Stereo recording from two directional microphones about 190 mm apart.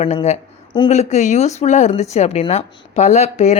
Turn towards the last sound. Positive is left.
turn(degrees=35)  # may be behind; listen again after turning